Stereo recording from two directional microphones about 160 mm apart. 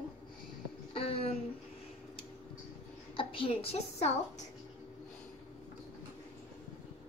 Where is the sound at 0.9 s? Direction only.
35° left (ahead or behind).